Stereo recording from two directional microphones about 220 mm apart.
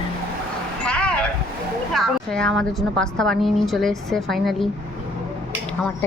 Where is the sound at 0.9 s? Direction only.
5° left (ahead or behind).